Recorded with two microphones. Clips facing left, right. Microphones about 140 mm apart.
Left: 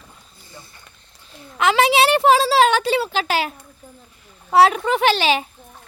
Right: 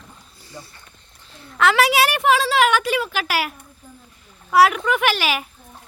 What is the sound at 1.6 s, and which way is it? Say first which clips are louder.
A woman's voice: left 1 dB; 20° left (ahead or behind).